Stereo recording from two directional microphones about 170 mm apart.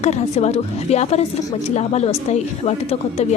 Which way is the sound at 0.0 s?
40° left (ahead or behind).